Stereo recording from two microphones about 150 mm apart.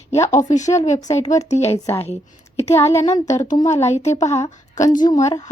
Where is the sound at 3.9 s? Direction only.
50° left (ahead or behind).